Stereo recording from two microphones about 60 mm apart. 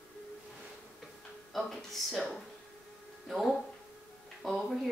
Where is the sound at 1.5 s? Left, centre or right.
Centre.